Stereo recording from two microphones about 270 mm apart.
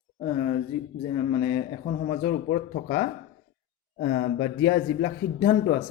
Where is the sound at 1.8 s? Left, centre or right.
Left.